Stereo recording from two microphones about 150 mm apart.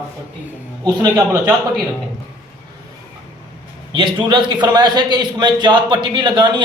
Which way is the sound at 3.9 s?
30° right (ahead or behind).